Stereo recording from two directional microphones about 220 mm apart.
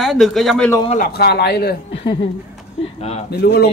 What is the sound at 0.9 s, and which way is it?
Speech, 40° left (ahead or behind).